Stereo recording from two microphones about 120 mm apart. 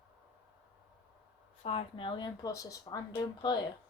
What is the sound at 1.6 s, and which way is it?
Speech, 50° left (ahead or behind).